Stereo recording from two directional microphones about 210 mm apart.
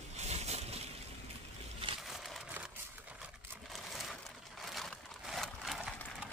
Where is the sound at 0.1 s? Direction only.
30° right (ahead or behind).